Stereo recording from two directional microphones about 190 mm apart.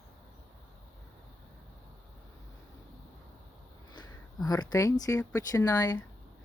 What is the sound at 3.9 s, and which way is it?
Speech, 20° left (ahead or behind).